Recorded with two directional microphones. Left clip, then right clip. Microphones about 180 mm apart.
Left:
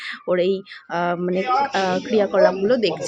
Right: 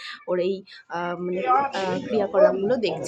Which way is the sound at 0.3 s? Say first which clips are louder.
Left 5 dB; 20° left (ahead or behind).